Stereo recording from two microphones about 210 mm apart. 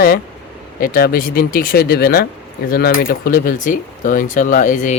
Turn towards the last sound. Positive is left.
turn(degrees=35)  # may be behind; listen again after turning